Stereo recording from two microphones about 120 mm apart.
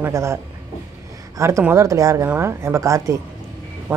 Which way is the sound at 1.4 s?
25° right (ahead or behind).